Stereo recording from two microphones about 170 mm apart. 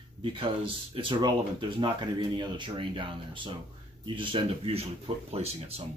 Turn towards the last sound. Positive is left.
turn(degrees=-35)  # may be behind; listen again after turning